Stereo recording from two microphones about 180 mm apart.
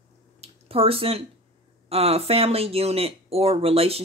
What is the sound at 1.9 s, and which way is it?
Speech, 35° right (ahead or behind).